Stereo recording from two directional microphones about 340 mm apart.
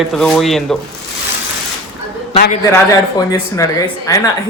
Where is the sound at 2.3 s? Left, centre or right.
Left.